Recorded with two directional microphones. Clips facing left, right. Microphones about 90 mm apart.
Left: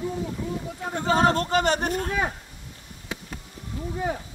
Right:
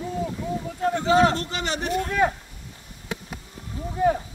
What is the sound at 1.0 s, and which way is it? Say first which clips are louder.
Speech: right 1 dB; 40° left (ahead or behind).